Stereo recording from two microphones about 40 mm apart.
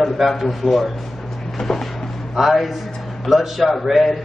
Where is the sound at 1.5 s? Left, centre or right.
Centre.